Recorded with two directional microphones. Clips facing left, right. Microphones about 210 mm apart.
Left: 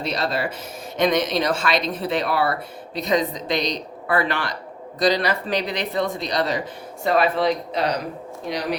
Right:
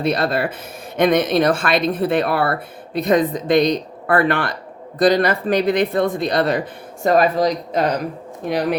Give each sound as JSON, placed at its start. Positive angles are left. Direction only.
{"t": 0.0, "sound": "speech", "side_deg": -55}
{"t": 7.0, "sound": "speech", "side_deg": -45}